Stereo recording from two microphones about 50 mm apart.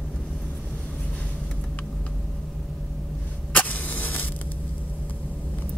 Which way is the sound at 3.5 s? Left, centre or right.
Left.